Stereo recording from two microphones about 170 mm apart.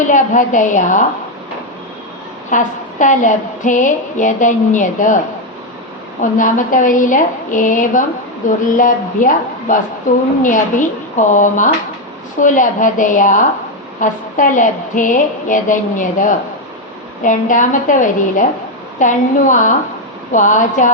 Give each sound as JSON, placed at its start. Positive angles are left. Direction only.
{"t": 0.1, "sound": "a woman's voice", "side_deg": 50}
{"t": 2.5, "sound": "a woman's voice", "side_deg": 50}
{"t": 6.3, "sound": "a woman's voice", "side_deg": 50}